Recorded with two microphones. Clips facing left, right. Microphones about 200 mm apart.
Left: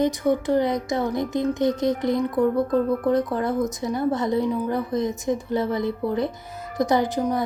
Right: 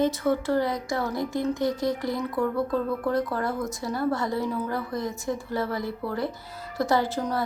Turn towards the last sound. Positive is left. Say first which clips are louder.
# left 4 dB
turn(degrees=15)  # may be behind; listen again after turning